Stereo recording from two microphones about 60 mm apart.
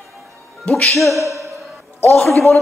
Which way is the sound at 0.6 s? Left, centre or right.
Centre.